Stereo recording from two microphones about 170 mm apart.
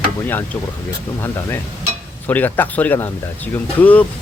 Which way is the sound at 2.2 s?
10° left (ahead or behind).